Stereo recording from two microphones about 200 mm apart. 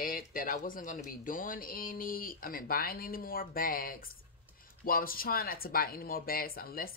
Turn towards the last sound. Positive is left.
turn(degrees=45)  # may be behind; listen again after turning